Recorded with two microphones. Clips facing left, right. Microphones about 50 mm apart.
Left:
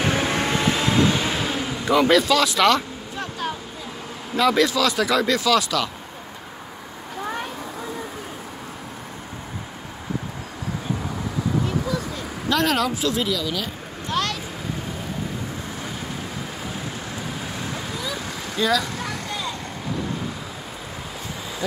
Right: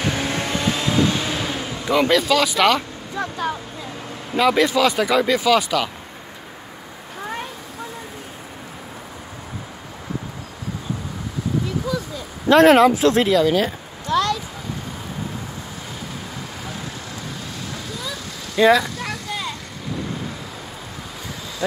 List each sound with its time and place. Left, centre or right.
0.0 s vehicle: centre
4.3 s speech: centre
12.4 s speech: right
18.6 s speech: right